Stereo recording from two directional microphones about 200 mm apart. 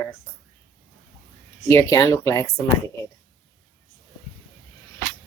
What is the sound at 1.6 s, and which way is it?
Speech, 15° left (ahead or behind).